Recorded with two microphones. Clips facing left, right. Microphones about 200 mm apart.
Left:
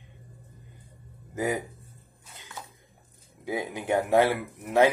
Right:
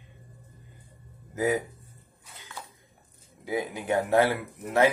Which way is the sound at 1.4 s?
15° left (ahead or behind).